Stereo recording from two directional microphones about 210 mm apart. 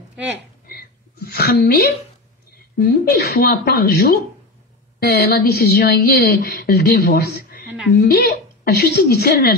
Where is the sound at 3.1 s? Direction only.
50° left (ahead or behind).